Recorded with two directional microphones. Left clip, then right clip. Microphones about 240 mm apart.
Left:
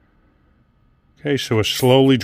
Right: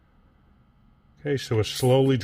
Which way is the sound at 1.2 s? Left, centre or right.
Left.